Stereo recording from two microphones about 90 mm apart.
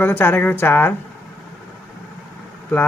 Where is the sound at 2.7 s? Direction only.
20° left (ahead or behind).